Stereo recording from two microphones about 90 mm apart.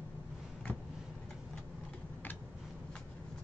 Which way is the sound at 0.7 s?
15° left (ahead or behind).